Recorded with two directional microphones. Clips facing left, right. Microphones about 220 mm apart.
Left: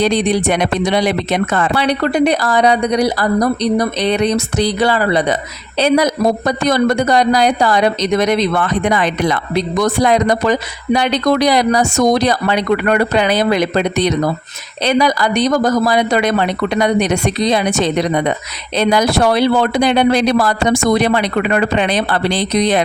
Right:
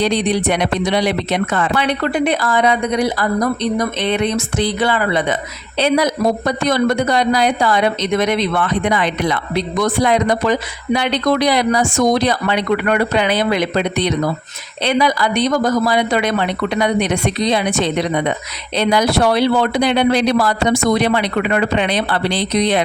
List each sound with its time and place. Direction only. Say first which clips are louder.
0.0 s speech: left 2 dB; 45° left (ahead or behind)